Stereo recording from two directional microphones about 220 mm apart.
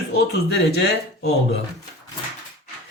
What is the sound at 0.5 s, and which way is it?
Speech, 50° left (ahead or behind).